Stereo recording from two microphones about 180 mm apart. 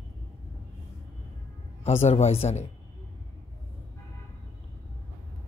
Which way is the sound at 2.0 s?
35° left (ahead or behind).